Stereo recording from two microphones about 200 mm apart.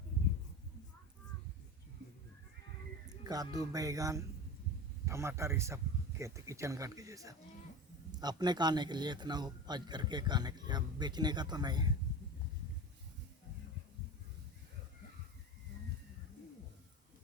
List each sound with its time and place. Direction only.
3.2 s a man's voice: 20° right (ahead or behind)